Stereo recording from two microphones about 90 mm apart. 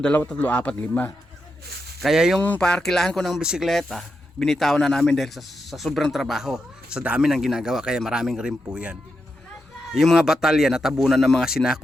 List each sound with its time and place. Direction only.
0.0 s a man's voice: 15° left (ahead or behind)
2.0 s speech: 5° right (ahead or behind)
2.6 s speech: 10° left (ahead or behind); by 9.0 s 10° right (ahead or behind)
9.9 s speech: centre (ahead or behind)